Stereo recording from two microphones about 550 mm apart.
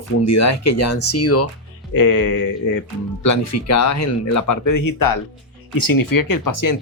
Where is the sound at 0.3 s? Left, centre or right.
Left.